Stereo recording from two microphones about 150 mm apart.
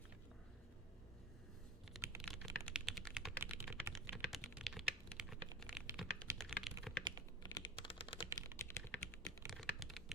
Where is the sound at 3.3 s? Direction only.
15° right (ahead or behind).